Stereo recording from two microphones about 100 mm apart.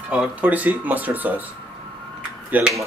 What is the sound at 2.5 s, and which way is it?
Speech, 15° right (ahead or behind).